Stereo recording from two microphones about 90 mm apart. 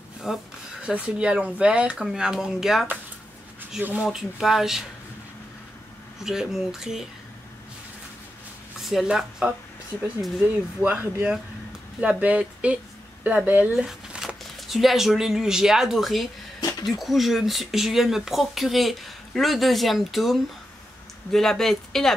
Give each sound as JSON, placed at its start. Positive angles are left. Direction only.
{"t": 0.2, "sound": "speech", "side_deg": -5}
{"t": 3.9, "sound": "speech", "side_deg": -5}
{"t": 6.2, "sound": "speech", "side_deg": -5}
{"t": 8.8, "sound": "speech", "side_deg": -5}